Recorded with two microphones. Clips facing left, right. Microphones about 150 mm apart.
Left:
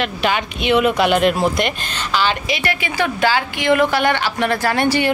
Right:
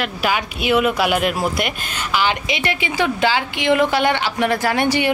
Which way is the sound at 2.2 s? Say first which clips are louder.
Left 1 dB; 20° right (ahead or behind).